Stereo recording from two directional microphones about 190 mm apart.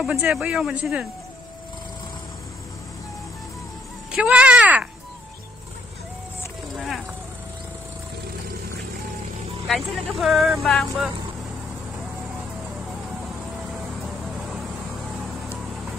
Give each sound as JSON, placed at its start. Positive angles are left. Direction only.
{"t": 0.0, "sound": "speech", "side_deg": -5}
{"t": 4.1, "sound": "a sound", "side_deg": -5}
{"t": 9.7, "sound": "speech", "side_deg": 0}